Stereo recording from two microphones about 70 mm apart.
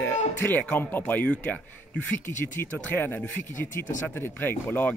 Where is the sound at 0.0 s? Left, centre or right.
Left.